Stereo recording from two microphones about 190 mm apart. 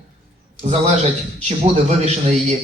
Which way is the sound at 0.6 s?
35° right (ahead or behind).